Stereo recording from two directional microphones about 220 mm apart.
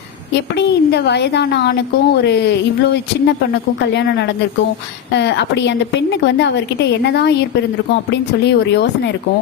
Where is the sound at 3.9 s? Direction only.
50° left (ahead or behind).